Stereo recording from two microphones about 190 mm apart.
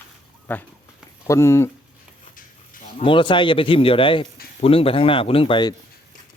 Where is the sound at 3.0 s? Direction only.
25° left (ahead or behind).